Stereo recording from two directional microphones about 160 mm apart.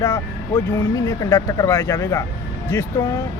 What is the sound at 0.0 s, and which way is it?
Speech, 20° left (ahead or behind).